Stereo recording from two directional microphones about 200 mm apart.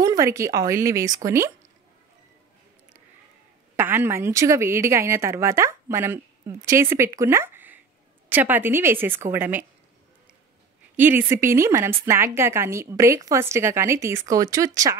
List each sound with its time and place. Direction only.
0.0 s a woman's voice: 15° right (ahead or behind)
3.7 s a woman's voice: 10° right (ahead or behind)
11.0 s a woman's voice: 10° right (ahead or behind)